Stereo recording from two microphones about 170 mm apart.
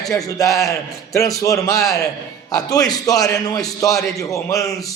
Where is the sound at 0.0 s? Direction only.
20° left (ahead or behind).